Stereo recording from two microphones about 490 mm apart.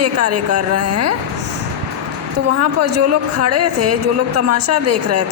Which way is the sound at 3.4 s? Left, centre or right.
Right.